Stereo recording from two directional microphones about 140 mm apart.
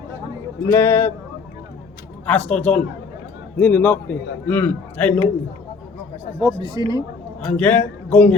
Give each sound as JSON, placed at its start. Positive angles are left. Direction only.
{"t": 0.7, "sound": "a man's voice", "side_deg": 15}
{"t": 2.2, "sound": "a man's voice", "side_deg": 10}
{"t": 6.4, "sound": "speech", "side_deg": -30}
{"t": 7.4, "sound": "a man's voice", "side_deg": 10}